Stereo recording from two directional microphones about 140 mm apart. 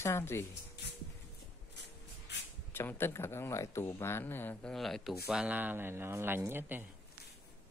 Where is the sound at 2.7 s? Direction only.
15° left (ahead or behind).